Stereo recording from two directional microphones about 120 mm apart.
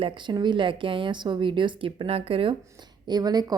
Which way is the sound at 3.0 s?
35° right (ahead or behind).